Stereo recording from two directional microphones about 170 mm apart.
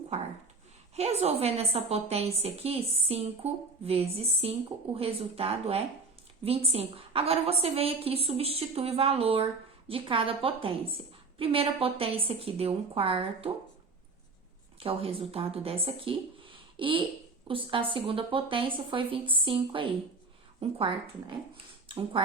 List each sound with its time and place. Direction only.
0.9 s a woman's voice: 40° right (ahead or behind)
14.8 s a woman's voice: 35° right (ahead or behind)